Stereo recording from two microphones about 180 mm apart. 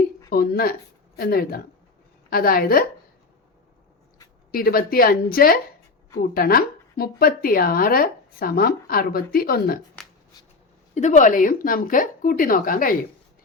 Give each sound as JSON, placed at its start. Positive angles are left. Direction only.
{"t": 0.3, "sound": "speech", "side_deg": 55}
{"t": 4.5, "sound": "speech", "side_deg": 55}
{"t": 10.9, "sound": "a woman's voice", "side_deg": 40}